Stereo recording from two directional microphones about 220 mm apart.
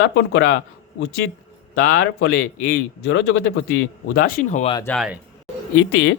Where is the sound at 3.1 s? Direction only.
55° left (ahead or behind).